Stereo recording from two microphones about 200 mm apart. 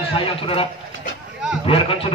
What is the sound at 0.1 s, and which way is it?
Speech, 30° left (ahead or behind).